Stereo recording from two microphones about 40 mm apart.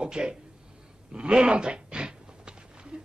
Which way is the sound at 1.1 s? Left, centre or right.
Right.